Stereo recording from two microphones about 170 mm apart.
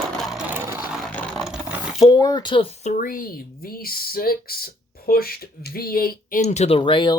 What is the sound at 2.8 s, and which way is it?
Speech, 50° left (ahead or behind).